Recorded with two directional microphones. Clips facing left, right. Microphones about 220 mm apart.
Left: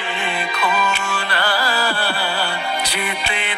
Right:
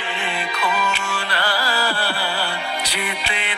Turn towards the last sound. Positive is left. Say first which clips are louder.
# left 2 dB
turn(degrees=50)  # may be behind; listen again after turning